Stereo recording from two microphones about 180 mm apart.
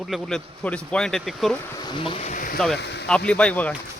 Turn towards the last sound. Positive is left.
turn(degrees=10)  # may be behind; listen again after turning